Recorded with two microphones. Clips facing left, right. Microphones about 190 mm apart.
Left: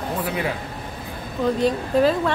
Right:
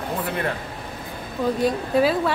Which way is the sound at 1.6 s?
10° right (ahead or behind).